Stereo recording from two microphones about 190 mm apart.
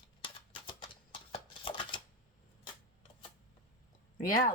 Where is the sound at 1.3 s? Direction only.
25° left (ahead or behind).